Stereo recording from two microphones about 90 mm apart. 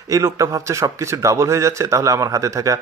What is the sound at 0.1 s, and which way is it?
Speech, 40° right (ahead or behind).